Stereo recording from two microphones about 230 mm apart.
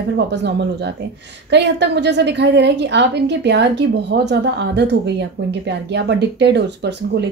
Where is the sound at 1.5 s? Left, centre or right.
Right.